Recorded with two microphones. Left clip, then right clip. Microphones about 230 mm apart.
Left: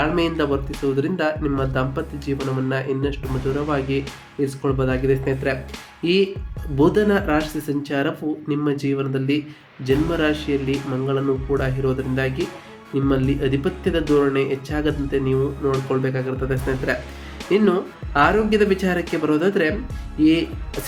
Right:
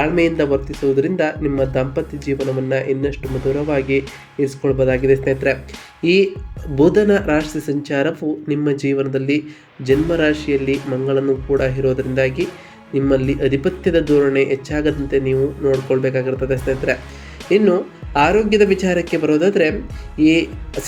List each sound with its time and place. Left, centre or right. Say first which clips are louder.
0.0 s speech: right 4 dB; centre
20.1 s speech: right 3 dB; left
20.8 s speech: right 5 dB; centre